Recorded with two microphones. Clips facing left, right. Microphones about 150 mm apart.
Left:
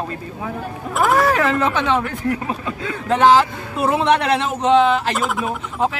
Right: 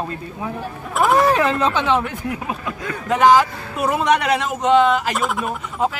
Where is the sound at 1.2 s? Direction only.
15° right (ahead or behind).